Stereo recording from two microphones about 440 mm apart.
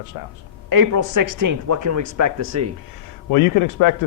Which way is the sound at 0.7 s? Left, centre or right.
Right.